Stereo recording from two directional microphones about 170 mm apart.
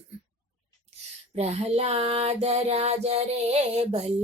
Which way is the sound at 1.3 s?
40° right (ahead or behind).